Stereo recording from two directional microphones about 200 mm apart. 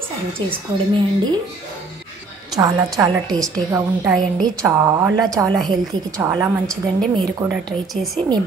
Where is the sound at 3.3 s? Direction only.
Centre (ahead or behind).